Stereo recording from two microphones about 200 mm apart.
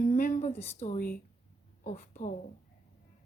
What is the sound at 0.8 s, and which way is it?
A woman's voice, 40° left (ahead or behind).